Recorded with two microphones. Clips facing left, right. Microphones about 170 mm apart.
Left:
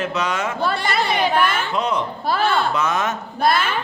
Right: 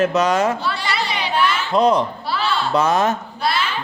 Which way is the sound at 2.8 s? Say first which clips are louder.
Right 4 dB; 35° right (ahead or behind).